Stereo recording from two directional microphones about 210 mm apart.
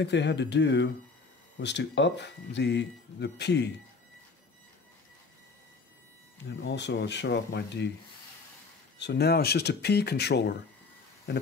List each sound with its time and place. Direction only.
0.0 s speech: 55° left (ahead or behind)
6.4 s speech: 55° left (ahead or behind)
8.9 s speech: 55° left (ahead or behind)